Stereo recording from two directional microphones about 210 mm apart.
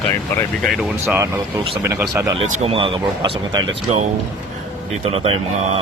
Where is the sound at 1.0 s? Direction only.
10° right (ahead or behind).